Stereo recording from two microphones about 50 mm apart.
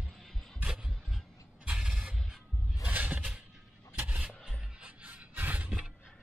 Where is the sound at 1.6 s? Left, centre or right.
Centre.